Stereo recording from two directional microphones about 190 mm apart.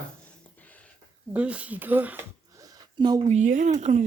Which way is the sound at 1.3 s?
5° right (ahead or behind).